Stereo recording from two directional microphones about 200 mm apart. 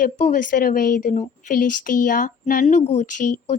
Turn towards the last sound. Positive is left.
turn(degrees=40)  # may be behind; listen again after turning